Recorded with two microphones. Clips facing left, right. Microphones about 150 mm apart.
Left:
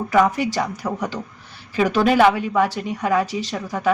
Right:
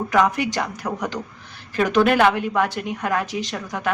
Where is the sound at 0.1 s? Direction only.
5° left (ahead or behind).